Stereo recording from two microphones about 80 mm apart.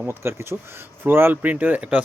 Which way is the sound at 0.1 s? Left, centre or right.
Right.